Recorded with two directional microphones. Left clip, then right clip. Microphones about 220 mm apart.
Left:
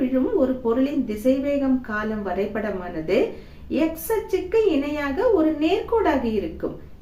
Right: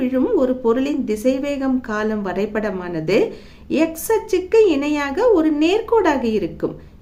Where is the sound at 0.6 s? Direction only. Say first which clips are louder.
Right 4 dB; 50° right (ahead or behind).